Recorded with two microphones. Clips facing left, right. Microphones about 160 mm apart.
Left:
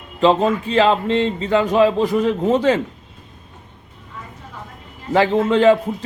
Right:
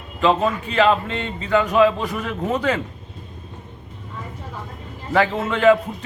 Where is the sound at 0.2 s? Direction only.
30° left (ahead or behind).